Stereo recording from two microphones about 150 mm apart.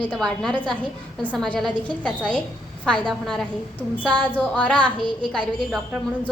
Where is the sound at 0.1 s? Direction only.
5° left (ahead or behind).